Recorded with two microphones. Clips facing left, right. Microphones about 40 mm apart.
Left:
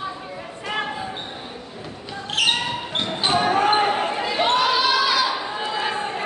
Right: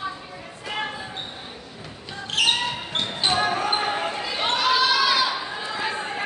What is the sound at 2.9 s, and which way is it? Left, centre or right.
Basketball bounce, centre.